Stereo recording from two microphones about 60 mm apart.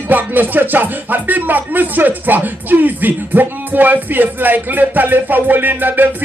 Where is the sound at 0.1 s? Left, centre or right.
Right.